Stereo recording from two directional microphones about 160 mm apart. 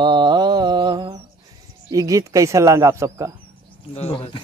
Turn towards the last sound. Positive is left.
turn(degrees=35)  # may be behind; listen again after turning